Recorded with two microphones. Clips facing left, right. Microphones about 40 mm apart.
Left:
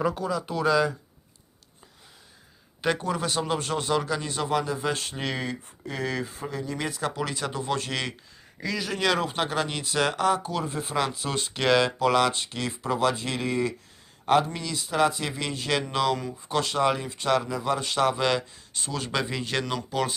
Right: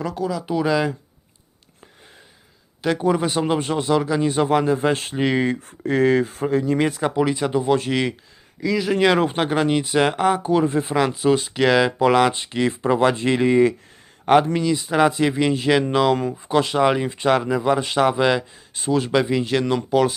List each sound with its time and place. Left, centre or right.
0.0 s speech: centre
0.4 s a man's voice: centre
3.0 s a man's voice: centre
4.2 s speech: right
5.6 s speech: right
6.0 s speech: right
7.0 s a man's voice: centre
9.0 s speech: right
11.1 s speech: centre
11.3 s a man's voice: centre
11.9 s speech: centre
12.8 s speech: right
14.6 s speech: right
16.5 s a man's voice: centre